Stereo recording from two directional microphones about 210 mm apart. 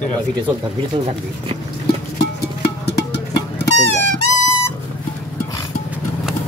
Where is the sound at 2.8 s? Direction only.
50° left (ahead or behind).